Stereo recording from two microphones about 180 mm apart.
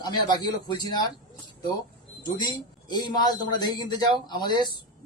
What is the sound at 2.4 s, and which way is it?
Speech, 25° left (ahead or behind).